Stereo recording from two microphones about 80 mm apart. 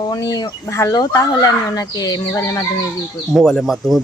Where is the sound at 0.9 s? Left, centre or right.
Left.